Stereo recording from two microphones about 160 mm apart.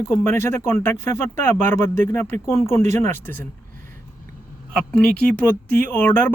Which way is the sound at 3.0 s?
15° left (ahead or behind).